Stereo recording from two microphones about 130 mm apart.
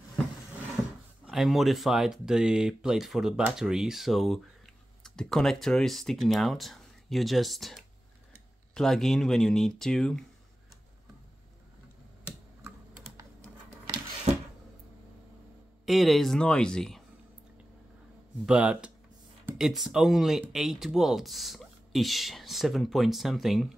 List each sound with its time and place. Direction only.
1.2 s speech: centre (ahead or behind)
13.2 s a sound: 25° right (ahead or behind)
15.8 s speech: centre (ahead or behind)
18.4 s speech: 5° right (ahead or behind)